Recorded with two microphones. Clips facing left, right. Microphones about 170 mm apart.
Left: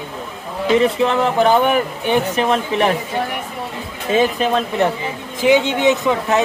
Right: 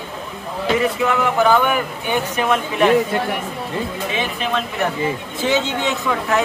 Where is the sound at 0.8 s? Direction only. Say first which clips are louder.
Left 3 dB; 30° left (ahead or behind).